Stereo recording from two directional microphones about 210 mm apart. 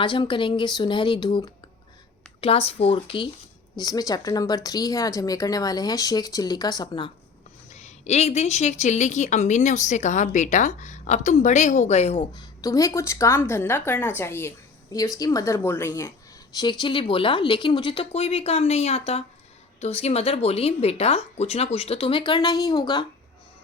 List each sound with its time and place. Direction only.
0.0 s a woman's voice: 25° left (ahead or behind)
7.7 s a woman's voice: 30° left (ahead or behind)